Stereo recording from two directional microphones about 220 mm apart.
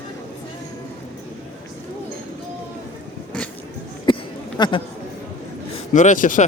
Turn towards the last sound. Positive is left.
turn(degrees=35)  # may be behind; listen again after turning